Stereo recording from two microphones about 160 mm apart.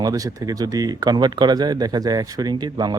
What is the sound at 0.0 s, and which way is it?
Speech, 20° right (ahead or behind).